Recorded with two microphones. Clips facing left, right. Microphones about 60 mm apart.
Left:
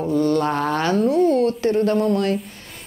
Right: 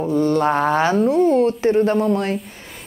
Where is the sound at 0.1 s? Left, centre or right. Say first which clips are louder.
Right 2 dB; right.